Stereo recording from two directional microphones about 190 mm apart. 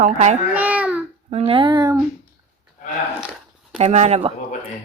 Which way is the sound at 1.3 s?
30° right (ahead or behind).